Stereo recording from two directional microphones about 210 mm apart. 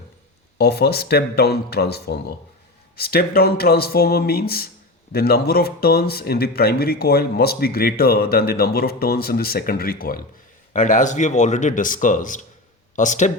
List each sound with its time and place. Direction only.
0.6 s speech: 50° left (ahead or behind)